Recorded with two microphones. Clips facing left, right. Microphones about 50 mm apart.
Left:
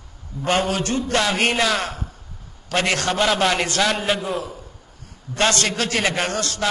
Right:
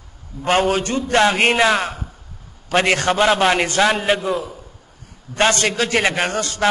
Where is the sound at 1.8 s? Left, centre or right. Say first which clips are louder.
Right 3 dB; centre.